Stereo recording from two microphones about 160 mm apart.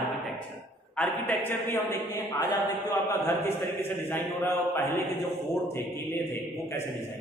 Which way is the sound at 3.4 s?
15° left (ahead or behind).